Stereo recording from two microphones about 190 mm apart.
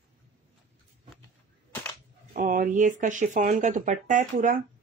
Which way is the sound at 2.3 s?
45° right (ahead or behind).